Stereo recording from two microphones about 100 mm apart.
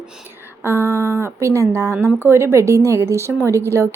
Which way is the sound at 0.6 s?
25° right (ahead or behind).